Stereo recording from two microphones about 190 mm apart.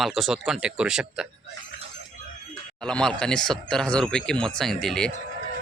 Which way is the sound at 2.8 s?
5° left (ahead or behind).